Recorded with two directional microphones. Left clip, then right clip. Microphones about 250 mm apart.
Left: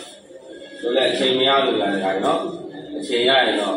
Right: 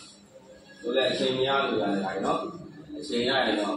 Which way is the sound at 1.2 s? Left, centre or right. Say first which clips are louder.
Left 8 dB; left.